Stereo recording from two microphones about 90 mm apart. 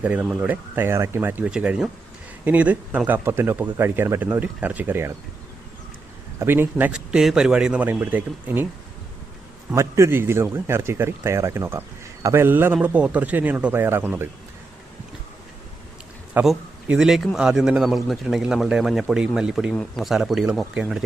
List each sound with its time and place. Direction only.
0.0 s a man's voice: 15° right (ahead or behind)
1.5 s a man's voice: 10° right (ahead or behind)
6.4 s a man's voice: 25° right (ahead or behind)
6.9 s speech: 5° right (ahead or behind)
9.7 s a man's voice: 30° right (ahead or behind)
16.4 s a man's voice: 5° right (ahead or behind)
19.7 s a man's voice: 5° left (ahead or behind)